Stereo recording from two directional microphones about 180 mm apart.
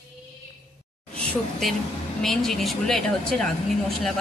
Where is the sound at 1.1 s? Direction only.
5° left (ahead or behind).